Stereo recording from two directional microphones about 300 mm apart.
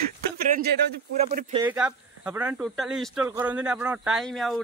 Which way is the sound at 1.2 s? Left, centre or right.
Right.